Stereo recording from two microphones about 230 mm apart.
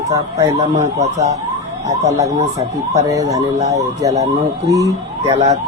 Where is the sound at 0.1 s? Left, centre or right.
Centre.